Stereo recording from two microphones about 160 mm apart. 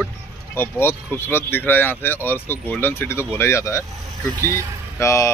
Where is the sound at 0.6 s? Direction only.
15° left (ahead or behind).